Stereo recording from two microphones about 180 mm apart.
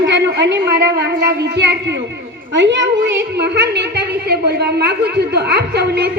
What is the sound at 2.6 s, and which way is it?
A woman's voice, 85° right.